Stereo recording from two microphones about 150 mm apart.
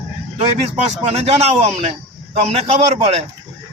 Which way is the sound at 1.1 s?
45° right (ahead or behind).